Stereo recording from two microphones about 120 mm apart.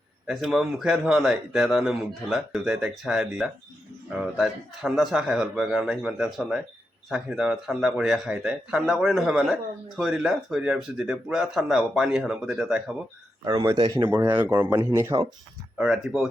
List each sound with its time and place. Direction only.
0.3 s a man's voice: 5° right (ahead or behind)
13.4 s a man's voice: 30° right (ahead or behind)
14.3 s speech: 15° right (ahead or behind)
15.8 s a man's voice: 5° right (ahead or behind)